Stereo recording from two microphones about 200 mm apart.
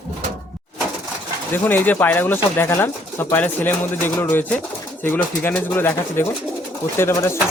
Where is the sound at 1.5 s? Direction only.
10° left (ahead or behind).